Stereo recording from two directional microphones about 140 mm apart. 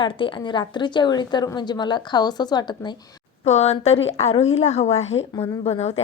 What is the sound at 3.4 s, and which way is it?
A woman's voice, 50° left (ahead or behind).